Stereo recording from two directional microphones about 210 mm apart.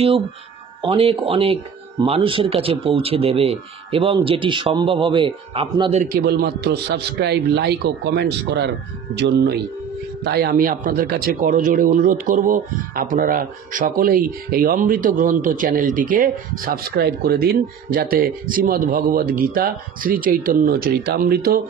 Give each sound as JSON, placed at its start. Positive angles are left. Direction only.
{"t": 0.8, "sound": "speech", "side_deg": -25}
{"t": 6.1, "sound": "speech", "side_deg": -50}